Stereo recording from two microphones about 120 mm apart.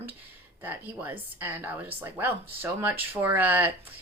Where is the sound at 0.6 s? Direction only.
15° right (ahead or behind).